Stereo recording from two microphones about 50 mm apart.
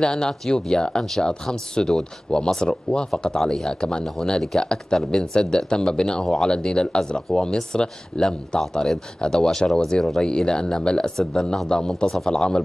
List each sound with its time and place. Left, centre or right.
0.0 s speech: centre
12.3 s speech: centre